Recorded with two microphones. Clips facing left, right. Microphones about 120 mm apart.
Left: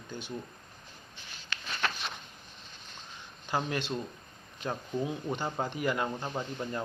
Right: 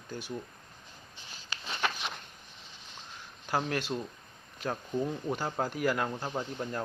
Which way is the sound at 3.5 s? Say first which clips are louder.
Right 1 dB; 5° right (ahead or behind).